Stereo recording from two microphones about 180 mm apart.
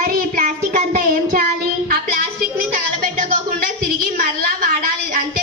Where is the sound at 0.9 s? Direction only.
55° right (ahead or behind).